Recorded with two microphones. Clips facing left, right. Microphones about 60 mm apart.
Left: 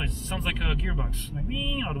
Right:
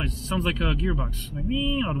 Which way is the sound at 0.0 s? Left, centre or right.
Centre.